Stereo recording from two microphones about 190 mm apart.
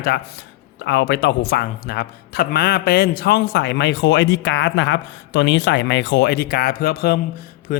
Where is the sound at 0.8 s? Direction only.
65° left (ahead or behind).